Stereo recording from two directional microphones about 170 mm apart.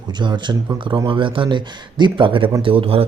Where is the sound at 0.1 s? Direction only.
25° right (ahead or behind).